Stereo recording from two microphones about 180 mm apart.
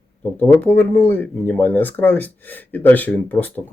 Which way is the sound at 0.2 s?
10° left (ahead or behind).